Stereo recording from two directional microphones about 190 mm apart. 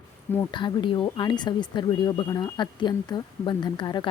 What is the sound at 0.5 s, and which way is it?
A woman's voice, 25° left (ahead or behind).